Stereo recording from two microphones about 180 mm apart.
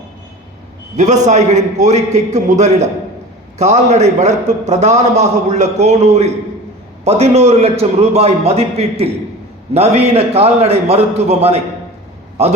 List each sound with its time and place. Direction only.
0.9 s a man's voice: 40° right (ahead or behind)